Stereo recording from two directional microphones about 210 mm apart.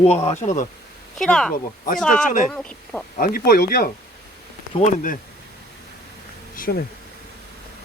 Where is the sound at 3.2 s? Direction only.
45° left (ahead or behind).